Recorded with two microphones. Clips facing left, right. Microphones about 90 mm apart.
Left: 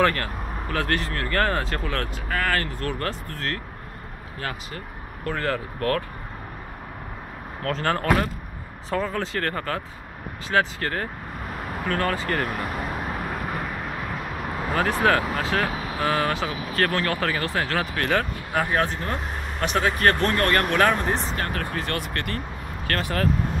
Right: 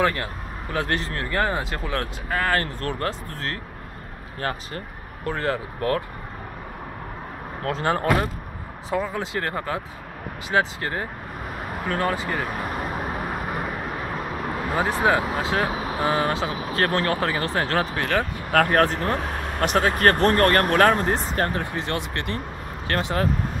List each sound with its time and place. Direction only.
0.0 s speech: 15° right (ahead or behind)
4.4 s speech: 35° right (ahead or behind)
7.6 s speech: 20° right (ahead or behind)
12.3 s speech: 5° right (ahead or behind)
14.7 s speech: 15° right (ahead or behind)
18.5 s speech: 55° right (ahead or behind)
19.8 s speech: 40° right (ahead or behind)
21.5 s speech: 20° right (ahead or behind)